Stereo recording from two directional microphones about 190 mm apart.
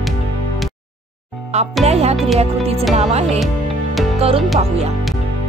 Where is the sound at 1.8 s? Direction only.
35° right (ahead or behind).